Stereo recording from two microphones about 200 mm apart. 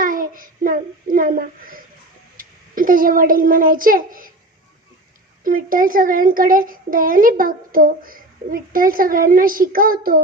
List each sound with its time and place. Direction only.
0.0 s child singing: 45° right (ahead or behind)
2.4 s a child's voice: 45° right (ahead or behind)
5.4 s a child's voice: 45° right (ahead or behind)